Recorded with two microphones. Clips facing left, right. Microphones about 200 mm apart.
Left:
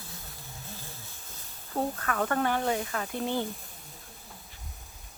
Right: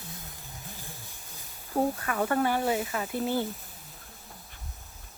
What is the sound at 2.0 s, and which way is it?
Speech, 10° right (ahead or behind).